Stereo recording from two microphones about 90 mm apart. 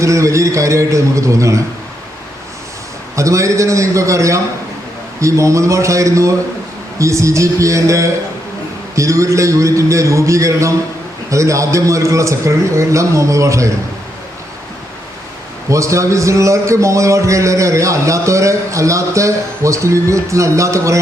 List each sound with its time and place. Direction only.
0.0 s speech: 35° right (ahead or behind)
3.2 s speech: 35° right (ahead or behind)
15.7 s speech: 35° right (ahead or behind)